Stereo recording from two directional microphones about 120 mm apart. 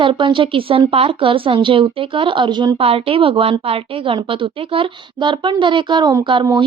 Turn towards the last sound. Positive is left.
turn(degrees=-45)  # may be behind; listen again after turning